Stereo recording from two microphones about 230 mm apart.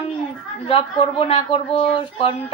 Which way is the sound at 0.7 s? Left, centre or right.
Left.